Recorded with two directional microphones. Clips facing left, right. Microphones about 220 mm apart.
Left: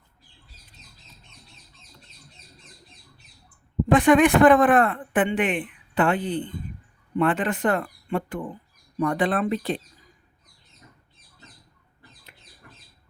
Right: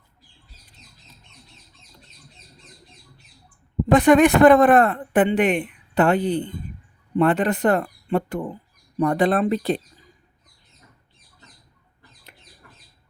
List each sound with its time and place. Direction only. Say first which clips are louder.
3.9 s speech: right 2 dB; 40° right (ahead or behind)